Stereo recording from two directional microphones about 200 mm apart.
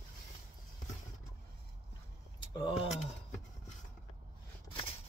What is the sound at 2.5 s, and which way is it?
Speech, 25° left (ahead or behind).